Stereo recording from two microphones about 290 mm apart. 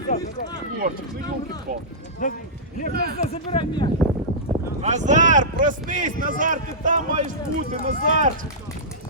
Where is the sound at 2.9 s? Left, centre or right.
Right.